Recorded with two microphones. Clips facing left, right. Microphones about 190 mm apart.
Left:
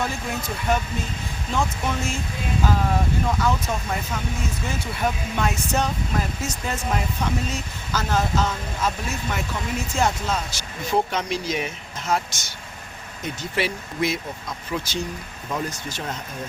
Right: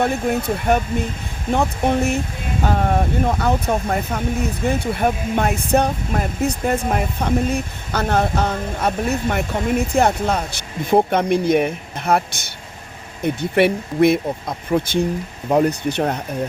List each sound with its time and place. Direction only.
0.0 s speech: 60° right (ahead or behind)